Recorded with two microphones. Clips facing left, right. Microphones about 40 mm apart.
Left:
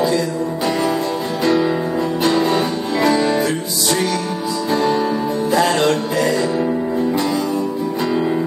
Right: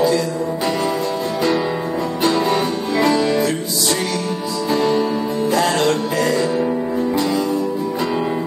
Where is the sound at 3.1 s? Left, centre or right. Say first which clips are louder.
Even; left.